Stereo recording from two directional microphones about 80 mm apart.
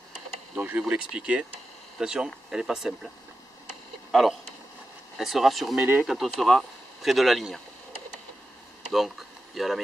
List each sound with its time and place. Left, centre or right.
0.6 s speech: right; by 3.1 s centre
4.1 s speech: centre
9.6 s speech: centre